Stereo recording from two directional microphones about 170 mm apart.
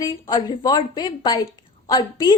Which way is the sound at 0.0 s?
25° left (ahead or behind).